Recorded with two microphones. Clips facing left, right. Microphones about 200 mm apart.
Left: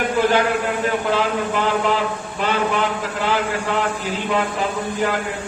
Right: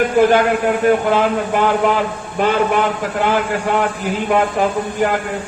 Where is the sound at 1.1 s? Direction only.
50° right (ahead or behind).